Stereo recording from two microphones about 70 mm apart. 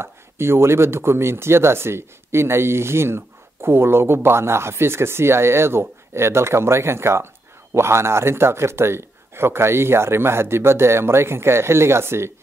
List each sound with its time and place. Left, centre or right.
0.0 s speech: right